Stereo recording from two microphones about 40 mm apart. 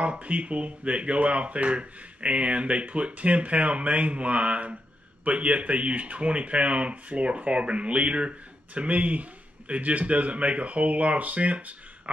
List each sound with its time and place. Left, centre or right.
0.0 s speech: right